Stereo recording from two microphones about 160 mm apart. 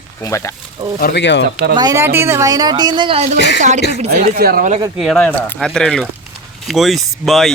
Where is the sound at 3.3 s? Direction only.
90° left.